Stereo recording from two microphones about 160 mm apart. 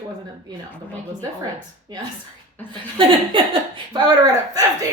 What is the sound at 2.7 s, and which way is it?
Speech, 30° right (ahead or behind).